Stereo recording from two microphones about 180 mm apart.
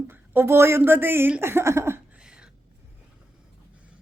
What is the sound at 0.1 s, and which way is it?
A woman's voice, 15° right (ahead or behind).